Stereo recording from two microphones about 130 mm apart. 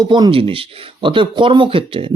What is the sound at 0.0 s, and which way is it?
Speech, 35° right (ahead or behind).